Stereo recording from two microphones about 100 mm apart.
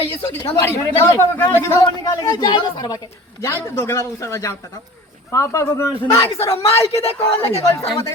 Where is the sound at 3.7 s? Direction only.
30° left (ahead or behind).